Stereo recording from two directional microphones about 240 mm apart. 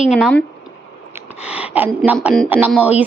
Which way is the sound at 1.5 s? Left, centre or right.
Centre.